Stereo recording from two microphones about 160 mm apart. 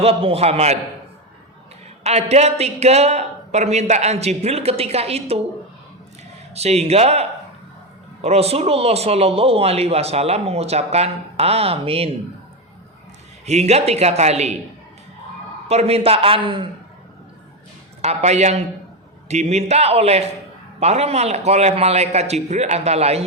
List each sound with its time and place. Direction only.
0.0 s speech: 40° right (ahead or behind)
2.0 s speech: 40° right (ahead or behind)
6.5 s speech: 40° right (ahead or behind)
13.4 s a man's voice: 45° right (ahead or behind)
15.7 s speech: 40° right (ahead or behind)
18.0 s a man's voice: 45° right (ahead or behind)